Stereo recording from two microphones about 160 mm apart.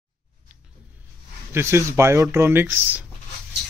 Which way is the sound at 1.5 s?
15° right (ahead or behind).